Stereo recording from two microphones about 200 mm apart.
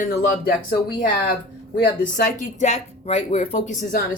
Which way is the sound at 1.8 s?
45° left (ahead or behind).